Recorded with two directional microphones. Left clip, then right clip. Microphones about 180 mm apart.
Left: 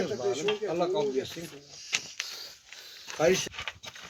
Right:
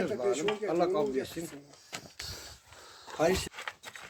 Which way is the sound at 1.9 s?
55° right (ahead or behind).